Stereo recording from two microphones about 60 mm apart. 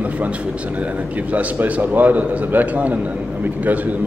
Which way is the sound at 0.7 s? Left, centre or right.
Right.